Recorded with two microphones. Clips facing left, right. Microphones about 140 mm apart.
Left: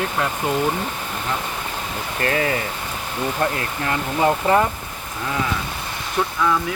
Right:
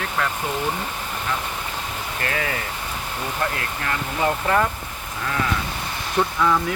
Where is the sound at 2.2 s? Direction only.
35° left (ahead or behind).